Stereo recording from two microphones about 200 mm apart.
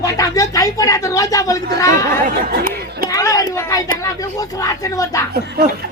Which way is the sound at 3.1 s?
15° left (ahead or behind).